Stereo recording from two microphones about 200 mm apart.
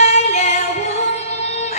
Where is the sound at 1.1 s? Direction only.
35° left (ahead or behind).